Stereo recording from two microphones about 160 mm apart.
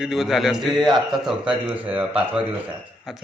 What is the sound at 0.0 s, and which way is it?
Speech, 5° right (ahead or behind).